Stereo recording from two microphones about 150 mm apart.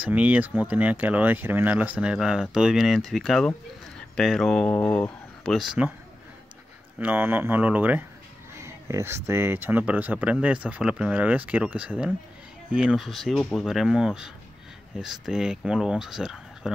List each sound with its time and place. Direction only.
0.0 s speech: 10° right (ahead or behind)
7.0 s speech: 10° right (ahead or behind)